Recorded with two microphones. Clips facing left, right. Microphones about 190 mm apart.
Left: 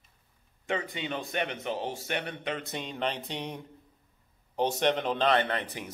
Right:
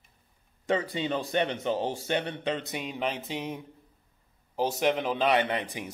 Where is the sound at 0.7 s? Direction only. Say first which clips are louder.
Right 5 dB; 35° right (ahead or behind).